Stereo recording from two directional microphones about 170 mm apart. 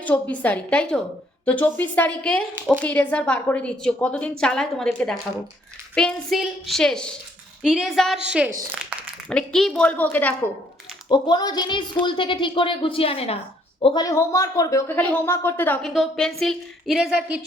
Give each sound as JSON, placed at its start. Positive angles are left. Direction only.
{"t": 0.0, "sound": "a woman's voice", "side_deg": 10}
{"t": 11.1, "sound": "speech", "side_deg": 25}
{"t": 13.8, "sound": "a woman's voice", "side_deg": 25}